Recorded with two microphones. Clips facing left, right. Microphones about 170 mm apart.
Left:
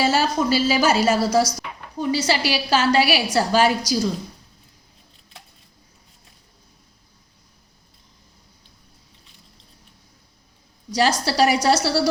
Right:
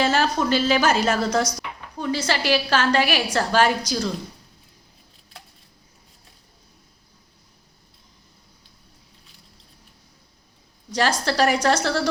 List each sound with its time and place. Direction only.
0.0 s a woman's voice: 5° left (ahead or behind)
10.9 s a woman's voice: 10° left (ahead or behind)